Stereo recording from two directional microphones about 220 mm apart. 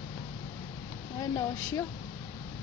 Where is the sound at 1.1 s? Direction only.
15° left (ahead or behind).